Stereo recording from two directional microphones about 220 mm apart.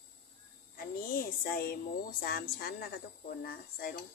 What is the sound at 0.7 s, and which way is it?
Speech, 45° left (ahead or behind).